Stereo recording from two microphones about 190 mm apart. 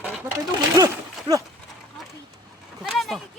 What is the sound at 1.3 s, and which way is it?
Speech, 25° right (ahead or behind).